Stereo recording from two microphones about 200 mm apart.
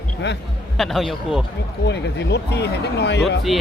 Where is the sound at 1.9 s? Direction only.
60° left (ahead or behind).